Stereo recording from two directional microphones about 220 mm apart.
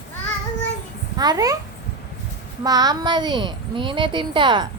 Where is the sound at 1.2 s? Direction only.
15° right (ahead or behind).